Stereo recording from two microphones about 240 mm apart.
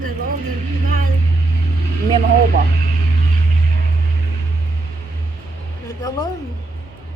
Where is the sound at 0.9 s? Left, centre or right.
Right.